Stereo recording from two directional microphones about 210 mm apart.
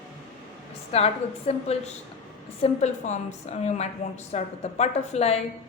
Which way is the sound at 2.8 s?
35° left (ahead or behind).